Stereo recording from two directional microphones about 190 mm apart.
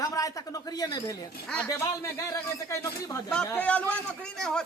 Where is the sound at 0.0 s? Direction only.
20° left (ahead or behind).